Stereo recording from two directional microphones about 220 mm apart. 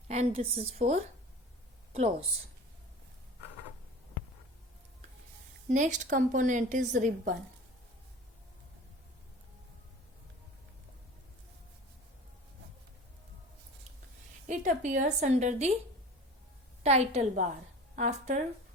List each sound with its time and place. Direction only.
0.1 s a woman's voice: 30° right (ahead or behind)
5.6 s a woman's voice: 35° right (ahead or behind)
14.4 s a woman's voice: 35° right (ahead or behind)
16.8 s a woman's voice: 30° right (ahead or behind)